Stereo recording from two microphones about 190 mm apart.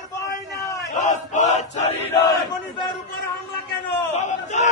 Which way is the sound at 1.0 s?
40° left (ahead or behind).